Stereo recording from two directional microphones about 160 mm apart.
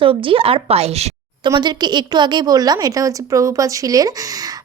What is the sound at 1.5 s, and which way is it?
A woman's voice, 25° right (ahead or behind).